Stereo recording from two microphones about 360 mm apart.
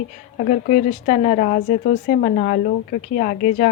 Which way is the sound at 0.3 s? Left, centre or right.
Left.